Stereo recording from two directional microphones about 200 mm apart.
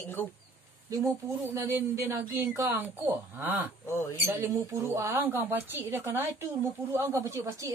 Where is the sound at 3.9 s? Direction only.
10° left (ahead or behind).